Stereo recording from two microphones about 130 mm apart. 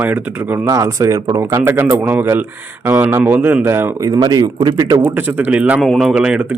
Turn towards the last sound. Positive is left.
turn(degrees=-5)  # may be behind; listen again after turning